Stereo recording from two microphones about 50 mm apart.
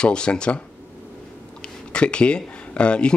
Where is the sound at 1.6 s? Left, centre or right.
Centre.